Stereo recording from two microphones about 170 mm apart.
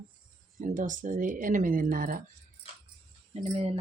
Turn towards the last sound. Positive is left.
turn(degrees=-35)  # may be behind; listen again after turning